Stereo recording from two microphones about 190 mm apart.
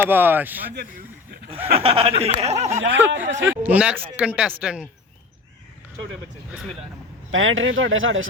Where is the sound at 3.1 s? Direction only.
75° right (ahead or behind).